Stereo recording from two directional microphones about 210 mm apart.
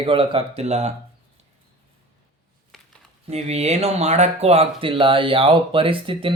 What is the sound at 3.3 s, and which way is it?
Speech, 30° right (ahead or behind).